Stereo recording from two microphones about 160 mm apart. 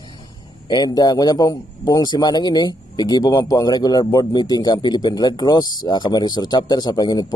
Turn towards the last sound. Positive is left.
turn(degrees=25)  # may be behind; listen again after turning